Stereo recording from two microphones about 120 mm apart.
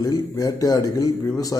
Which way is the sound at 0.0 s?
30° left (ahead or behind).